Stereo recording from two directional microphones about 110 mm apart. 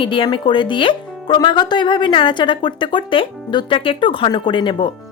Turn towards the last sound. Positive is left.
turn(degrees=45)  # may be behind; listen again after turning